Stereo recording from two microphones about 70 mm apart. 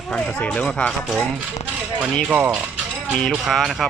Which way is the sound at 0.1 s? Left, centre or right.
Centre.